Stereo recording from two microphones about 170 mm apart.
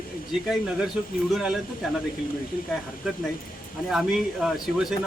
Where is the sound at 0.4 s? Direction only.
5° right (ahead or behind).